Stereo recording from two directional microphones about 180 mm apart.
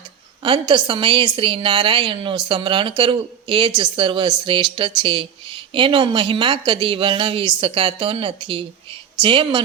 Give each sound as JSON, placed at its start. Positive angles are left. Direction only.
{"t": 0.4, "sound": "speech", "side_deg": -25}